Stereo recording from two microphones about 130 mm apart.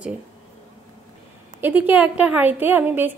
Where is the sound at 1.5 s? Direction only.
15° right (ahead or behind).